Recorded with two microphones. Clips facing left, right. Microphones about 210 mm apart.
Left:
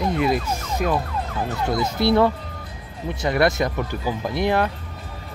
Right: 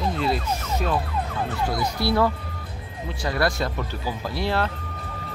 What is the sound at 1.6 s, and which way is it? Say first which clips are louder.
Speech: left 6 dB; 20° left (ahead or behind).